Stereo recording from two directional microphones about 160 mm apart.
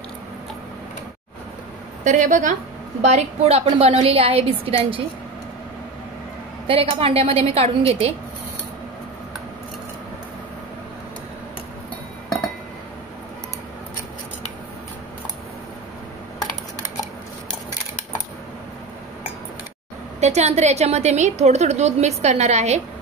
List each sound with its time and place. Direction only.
2.0 s a woman's voice: 50° right (ahead or behind)
6.7 s a woman's voice: 35° right (ahead or behind)
20.2 s a woman's voice: 45° right (ahead or behind)